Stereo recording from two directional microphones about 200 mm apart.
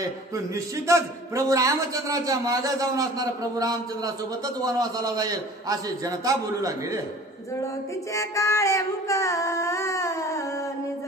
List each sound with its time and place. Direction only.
0.8 s a man's voice: 15° right (ahead or behind)
8.1 s female singing: 15° left (ahead or behind)